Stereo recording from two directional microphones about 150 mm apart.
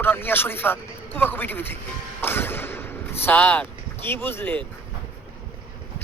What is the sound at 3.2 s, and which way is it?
Speech, 10° left (ahead or behind).